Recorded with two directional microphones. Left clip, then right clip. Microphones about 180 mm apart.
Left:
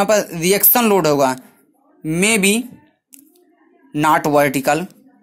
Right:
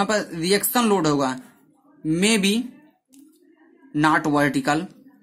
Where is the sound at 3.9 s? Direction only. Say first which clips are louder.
Left 5 dB; 20° left (ahead or behind).